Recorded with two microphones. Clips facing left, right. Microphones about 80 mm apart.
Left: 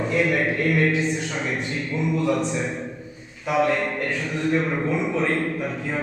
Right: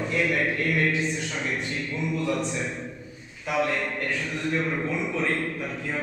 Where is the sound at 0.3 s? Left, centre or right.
Centre.